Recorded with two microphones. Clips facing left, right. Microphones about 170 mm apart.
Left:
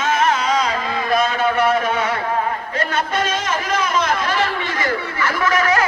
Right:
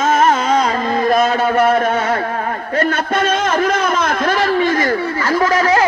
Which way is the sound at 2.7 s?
50° right (ahead or behind).